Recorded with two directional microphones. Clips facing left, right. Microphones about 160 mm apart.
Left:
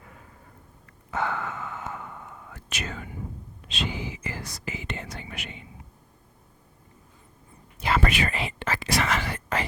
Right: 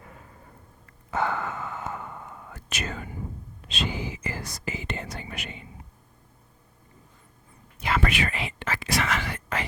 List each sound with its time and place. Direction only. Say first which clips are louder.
1.1 s whispering: right 2 dB; 40° right (ahead or behind)
3.7 s speech: right 1 dB; 40° right (ahead or behind)
7.8 s speech: left 1 dB; 35° left (ahead or behind)